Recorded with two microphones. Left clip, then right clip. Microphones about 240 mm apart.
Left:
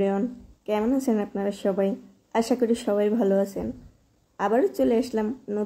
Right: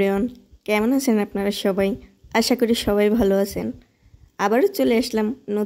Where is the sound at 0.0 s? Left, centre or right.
Right.